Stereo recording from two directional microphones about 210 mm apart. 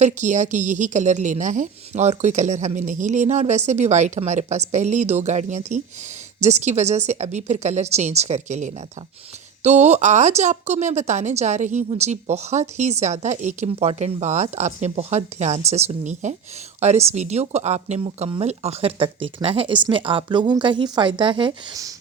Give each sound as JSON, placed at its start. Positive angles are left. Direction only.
{"t": 0.0, "sound": "a woman's voice", "side_deg": -35}